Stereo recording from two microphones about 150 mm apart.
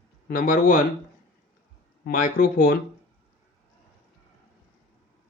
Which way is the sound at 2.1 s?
70° left (ahead or behind).